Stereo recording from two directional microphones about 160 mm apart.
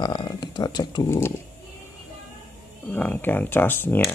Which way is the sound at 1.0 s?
15° left (ahead or behind).